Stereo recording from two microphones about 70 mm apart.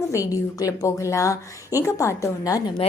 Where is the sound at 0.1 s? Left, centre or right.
Left.